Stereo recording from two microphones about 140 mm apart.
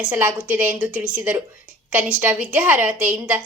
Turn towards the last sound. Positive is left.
turn(degrees=-10)  # may be behind; listen again after turning